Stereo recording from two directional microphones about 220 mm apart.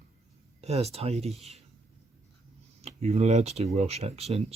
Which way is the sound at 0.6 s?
30° right (ahead or behind).